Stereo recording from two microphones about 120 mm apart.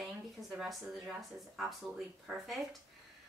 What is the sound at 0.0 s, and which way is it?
A woman's voice, centre (ahead or behind).